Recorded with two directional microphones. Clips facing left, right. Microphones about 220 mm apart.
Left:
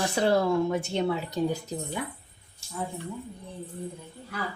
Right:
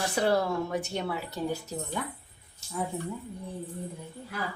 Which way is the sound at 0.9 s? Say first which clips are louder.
Left 5 dB; 25° left (ahead or behind).